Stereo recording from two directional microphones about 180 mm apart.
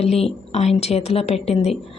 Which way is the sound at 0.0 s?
35° left (ahead or behind).